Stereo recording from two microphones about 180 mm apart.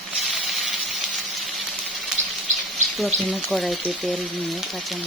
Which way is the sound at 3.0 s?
Centre (ahead or behind).